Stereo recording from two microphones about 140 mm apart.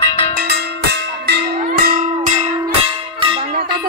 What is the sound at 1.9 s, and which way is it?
Bell, 75° right (ahead or behind).